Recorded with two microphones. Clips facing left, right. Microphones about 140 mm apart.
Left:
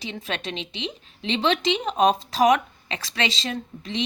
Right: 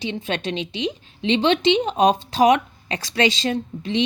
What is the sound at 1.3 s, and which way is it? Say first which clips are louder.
Speech: right 5 dB; 35° right (ahead or behind).